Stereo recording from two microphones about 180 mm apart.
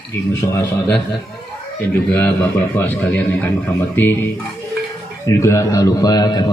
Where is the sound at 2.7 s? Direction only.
10° left (ahead or behind).